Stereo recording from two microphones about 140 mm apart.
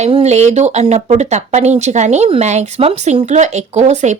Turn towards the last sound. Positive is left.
turn(degrees=-55)  # may be behind; listen again after turning